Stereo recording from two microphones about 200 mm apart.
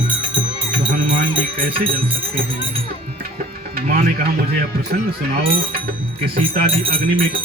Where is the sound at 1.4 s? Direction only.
45° right (ahead or behind).